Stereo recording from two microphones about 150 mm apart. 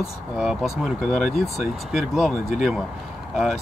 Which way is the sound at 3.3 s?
Centre (ahead or behind).